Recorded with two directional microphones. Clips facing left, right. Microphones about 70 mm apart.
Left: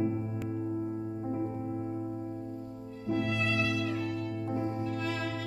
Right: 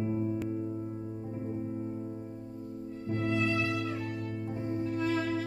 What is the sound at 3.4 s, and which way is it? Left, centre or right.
Music, right.